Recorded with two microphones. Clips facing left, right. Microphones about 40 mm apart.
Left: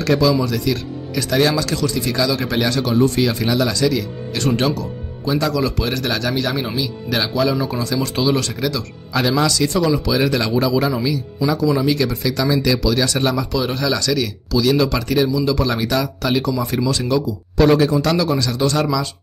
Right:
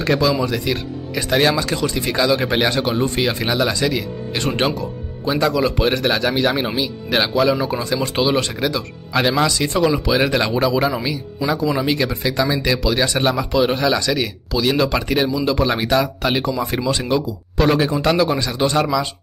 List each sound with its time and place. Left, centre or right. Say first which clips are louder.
0.0 s speech: left 1 dB; right